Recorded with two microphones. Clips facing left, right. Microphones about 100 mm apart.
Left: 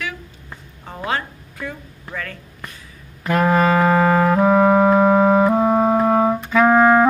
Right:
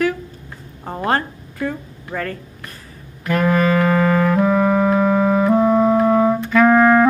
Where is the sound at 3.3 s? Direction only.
30° left (ahead or behind).